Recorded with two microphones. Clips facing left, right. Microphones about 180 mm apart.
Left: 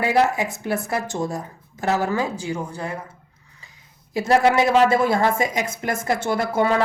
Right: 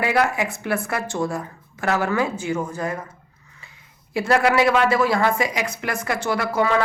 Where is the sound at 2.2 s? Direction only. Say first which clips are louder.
Right 2 dB; 35° left (ahead or behind).